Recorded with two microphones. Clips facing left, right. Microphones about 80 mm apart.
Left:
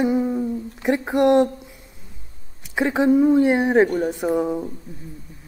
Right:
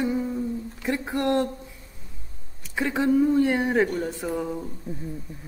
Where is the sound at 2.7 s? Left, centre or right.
Left.